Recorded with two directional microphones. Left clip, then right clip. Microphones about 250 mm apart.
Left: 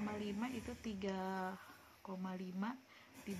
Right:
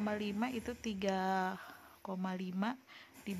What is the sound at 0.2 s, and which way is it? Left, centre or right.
Speech, right.